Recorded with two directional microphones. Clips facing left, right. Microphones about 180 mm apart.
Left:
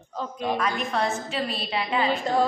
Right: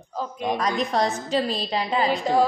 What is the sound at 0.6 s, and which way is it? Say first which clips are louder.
A woman's voice: right 5 dB; 35° right (ahead or behind).